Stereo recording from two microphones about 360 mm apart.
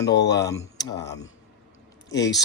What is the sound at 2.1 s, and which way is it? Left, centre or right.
Speech, left.